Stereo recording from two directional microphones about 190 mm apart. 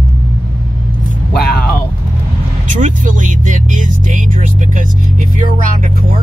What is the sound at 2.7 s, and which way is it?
Vehicle, 45° right (ahead or behind).